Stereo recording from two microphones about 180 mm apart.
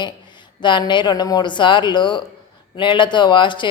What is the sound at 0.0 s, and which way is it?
Speech, 25° left (ahead or behind).